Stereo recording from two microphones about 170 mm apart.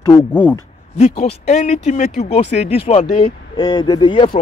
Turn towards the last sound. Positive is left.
turn(degrees=25)  # may be behind; listen again after turning